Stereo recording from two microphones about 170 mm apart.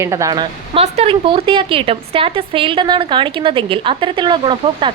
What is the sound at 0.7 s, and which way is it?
A woman's voice, 40° right (ahead or behind).